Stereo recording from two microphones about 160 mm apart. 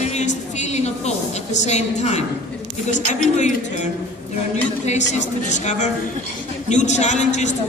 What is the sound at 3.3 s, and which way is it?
Speech, 45° left (ahead or behind).